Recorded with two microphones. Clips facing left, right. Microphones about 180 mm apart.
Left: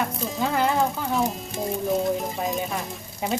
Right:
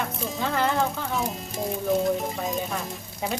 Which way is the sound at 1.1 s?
Centre (ahead or behind).